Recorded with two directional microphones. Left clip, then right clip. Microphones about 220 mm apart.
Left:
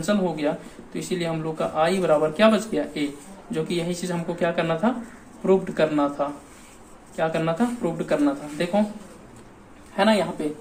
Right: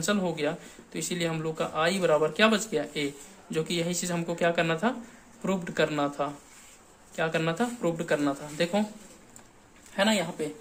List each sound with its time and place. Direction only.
0.0 s speech: 50° right (ahead or behind)
9.9 s a man's voice: 50° right (ahead or behind)